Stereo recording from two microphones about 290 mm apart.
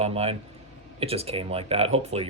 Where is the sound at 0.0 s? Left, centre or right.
Centre.